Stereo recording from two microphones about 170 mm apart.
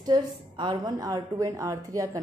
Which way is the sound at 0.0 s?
25° right (ahead or behind).